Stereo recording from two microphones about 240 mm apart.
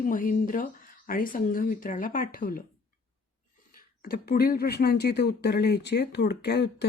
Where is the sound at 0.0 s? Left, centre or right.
Left.